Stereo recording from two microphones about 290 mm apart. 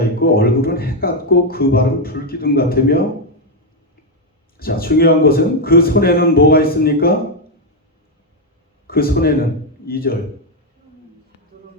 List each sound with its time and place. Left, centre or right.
0.2 s a man's voice: left
4.5 s a man's voice: left
8.9 s a man's voice: left